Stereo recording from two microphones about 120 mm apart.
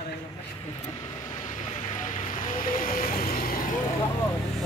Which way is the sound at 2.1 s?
90° left.